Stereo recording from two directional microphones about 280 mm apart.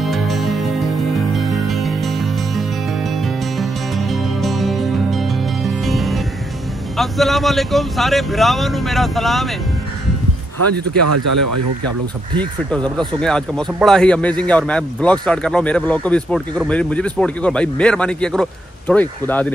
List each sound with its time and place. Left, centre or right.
0.0 s music: centre
7.0 s speech: centre
11.1 s speech: right
12.4 s speech: centre